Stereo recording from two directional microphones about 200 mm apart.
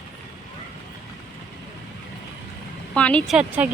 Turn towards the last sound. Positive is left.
turn(degrees=-5)  # may be behind; listen again after turning